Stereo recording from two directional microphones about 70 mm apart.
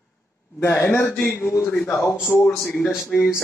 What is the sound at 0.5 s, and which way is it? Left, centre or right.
Speech, left.